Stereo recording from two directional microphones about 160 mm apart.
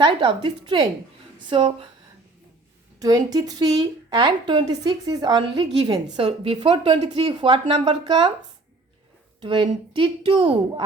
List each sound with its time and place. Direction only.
0.0 s speech: 30° right (ahead or behind)
3.0 s a woman's voice: 25° right (ahead or behind)
9.4 s speech: 30° right (ahead or behind)